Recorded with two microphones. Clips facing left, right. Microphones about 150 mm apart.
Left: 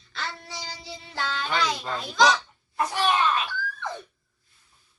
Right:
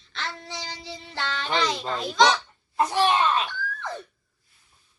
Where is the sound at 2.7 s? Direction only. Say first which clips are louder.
Right 3 dB; 25° right (ahead or behind).